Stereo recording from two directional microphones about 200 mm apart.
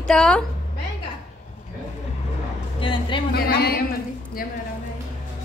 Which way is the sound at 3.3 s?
50° left (ahead or behind).